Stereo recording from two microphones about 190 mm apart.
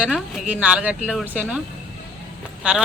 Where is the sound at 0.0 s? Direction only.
5° right (ahead or behind).